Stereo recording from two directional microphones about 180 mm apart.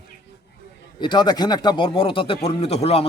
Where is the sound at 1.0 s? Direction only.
25° left (ahead or behind).